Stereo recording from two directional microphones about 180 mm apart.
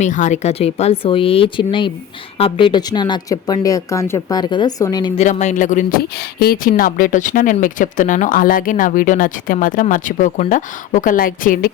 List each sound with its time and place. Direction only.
0.0 s a woman's voice: 40° left (ahead or behind); by 5.1 s 20° left (ahead or behind)
5.1 s speech: 40° left (ahead or behind)